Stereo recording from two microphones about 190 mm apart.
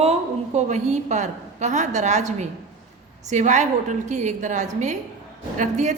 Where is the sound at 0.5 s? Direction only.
35° right (ahead or behind).